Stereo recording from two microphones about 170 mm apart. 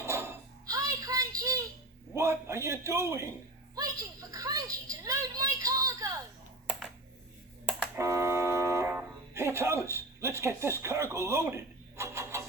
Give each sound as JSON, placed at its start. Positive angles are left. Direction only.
{"t": 0.0, "sound": "a sound", "side_deg": -15}
{"t": 2.1, "sound": "a man's voice", "side_deg": -15}
{"t": 6.7, "sound": "computer keyboard", "side_deg": 0}
{"t": 7.9, "sound": "music", "side_deg": -15}